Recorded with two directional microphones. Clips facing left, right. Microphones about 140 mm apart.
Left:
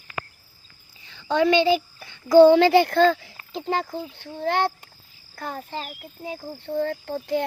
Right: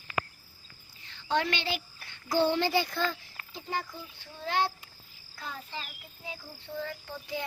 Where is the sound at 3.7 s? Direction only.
70° left (ahead or behind).